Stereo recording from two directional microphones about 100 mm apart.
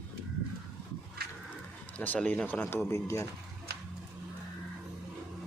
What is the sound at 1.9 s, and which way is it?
A man's voice, 15° left (ahead or behind).